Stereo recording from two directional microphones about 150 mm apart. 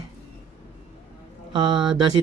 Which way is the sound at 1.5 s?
30° right (ahead or behind).